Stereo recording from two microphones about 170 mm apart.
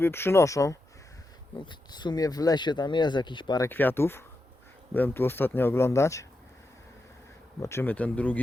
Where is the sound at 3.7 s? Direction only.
10° left (ahead or behind).